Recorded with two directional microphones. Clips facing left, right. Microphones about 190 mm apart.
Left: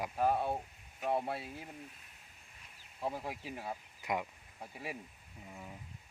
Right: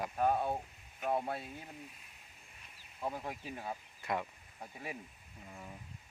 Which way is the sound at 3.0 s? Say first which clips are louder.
Left 1 dB; 5° left (ahead or behind).